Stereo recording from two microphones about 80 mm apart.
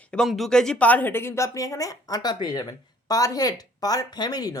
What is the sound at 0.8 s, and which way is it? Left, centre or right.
A woman's voice, left.